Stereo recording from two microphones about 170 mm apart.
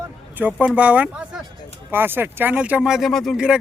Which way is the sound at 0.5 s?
5° right (ahead or behind).